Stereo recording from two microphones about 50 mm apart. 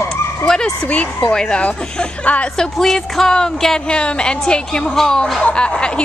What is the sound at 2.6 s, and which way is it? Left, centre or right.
A woman's voice, centre.